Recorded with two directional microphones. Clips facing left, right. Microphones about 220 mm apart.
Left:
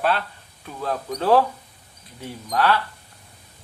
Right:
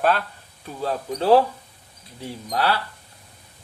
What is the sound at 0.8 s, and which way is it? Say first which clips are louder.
Speech: right 1 dB; 30° right (ahead or behind).